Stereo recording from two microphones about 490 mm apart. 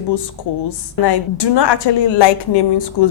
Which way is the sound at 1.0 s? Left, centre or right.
Left.